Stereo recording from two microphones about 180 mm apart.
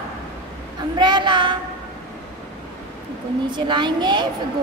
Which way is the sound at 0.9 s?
25° right (ahead or behind).